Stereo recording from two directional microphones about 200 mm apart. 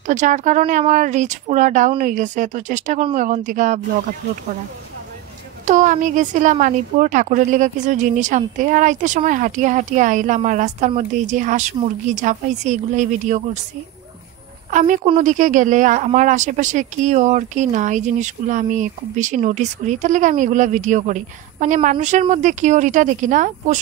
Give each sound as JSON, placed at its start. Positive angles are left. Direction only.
{"t": 0.0, "sound": "speech", "side_deg": -40}
{"t": 5.7, "sound": "speech", "side_deg": -40}
{"t": 14.7, "sound": "a woman's voice", "side_deg": -40}